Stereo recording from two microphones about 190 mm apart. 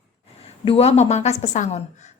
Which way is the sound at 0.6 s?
30° left (ahead or behind).